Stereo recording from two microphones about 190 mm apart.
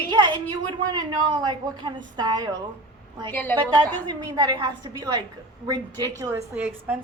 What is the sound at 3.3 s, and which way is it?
Speech, 10° left (ahead or behind).